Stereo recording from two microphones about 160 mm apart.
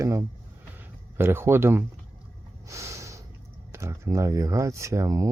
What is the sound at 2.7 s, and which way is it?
Snort, 20° right (ahead or behind).